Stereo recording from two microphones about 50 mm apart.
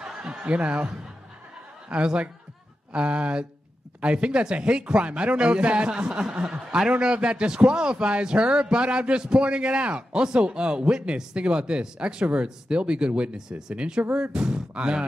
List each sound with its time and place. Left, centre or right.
0.4 s a man's voice: right